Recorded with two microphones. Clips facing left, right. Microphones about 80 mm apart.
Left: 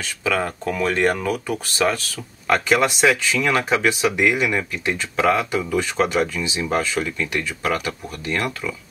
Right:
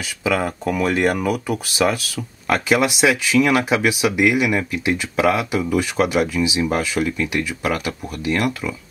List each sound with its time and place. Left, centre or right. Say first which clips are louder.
0.2 s speech: right 2 dB; centre